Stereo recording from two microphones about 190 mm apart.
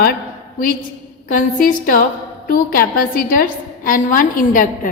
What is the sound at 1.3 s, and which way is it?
A woman's voice, 45° left (ahead or behind).